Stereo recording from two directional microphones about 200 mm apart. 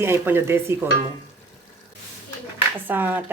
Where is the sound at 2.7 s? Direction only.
10° right (ahead or behind).